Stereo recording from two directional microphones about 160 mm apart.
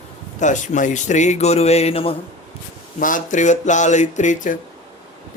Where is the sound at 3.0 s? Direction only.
55° left (ahead or behind).